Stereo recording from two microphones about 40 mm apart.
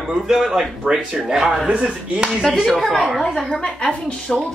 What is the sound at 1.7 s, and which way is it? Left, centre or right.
Speech, right.